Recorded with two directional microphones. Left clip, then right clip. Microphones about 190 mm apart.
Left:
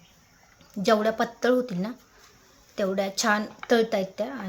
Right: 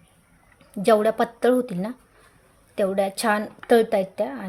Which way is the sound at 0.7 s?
25° right (ahead or behind).